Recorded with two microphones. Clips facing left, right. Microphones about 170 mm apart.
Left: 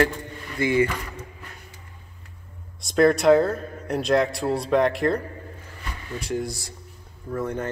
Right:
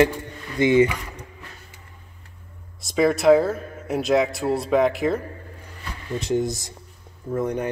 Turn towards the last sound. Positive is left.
turn(degrees=-15)  # may be behind; listen again after turning